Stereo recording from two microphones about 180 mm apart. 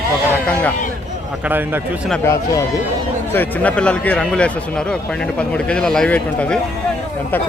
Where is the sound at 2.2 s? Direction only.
15° left (ahead or behind).